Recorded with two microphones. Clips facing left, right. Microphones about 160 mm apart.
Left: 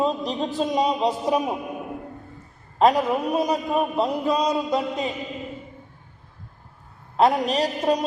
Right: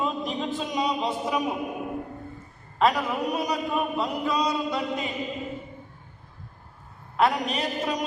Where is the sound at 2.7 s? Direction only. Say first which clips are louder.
Left 5 dB; 40° left (ahead or behind).